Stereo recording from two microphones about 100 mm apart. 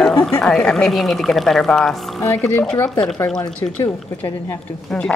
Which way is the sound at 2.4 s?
20° left (ahead or behind).